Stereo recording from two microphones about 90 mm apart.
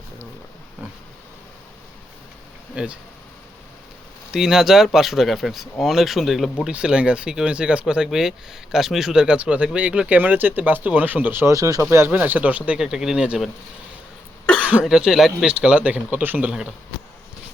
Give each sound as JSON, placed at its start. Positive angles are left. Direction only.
{"t": 2.8, "sound": "speech", "side_deg": -15}
{"t": 4.3, "sound": "speech", "side_deg": -5}
{"t": 6.7, "sound": "speech", "side_deg": -10}
{"t": 11.5, "sound": "speech", "side_deg": -35}
{"t": 12.1, "sound": "speech", "side_deg": -15}
{"t": 14.4, "sound": "cough", "side_deg": 10}
{"t": 14.8, "sound": "speech", "side_deg": -5}